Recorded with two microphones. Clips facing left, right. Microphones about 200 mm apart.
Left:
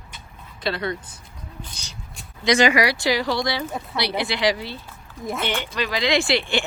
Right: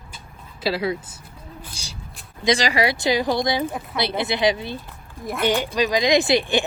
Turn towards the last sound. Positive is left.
turn(degrees=-15)  # may be behind; listen again after turning